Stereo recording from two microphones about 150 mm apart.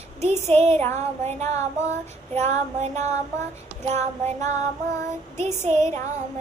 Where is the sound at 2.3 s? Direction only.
45° right (ahead or behind).